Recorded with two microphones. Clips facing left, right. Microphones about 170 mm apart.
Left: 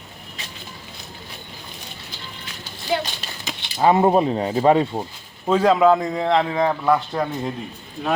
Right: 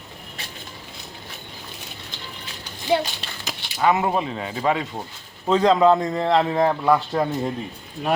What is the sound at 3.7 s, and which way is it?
Speech, 30° left (ahead or behind).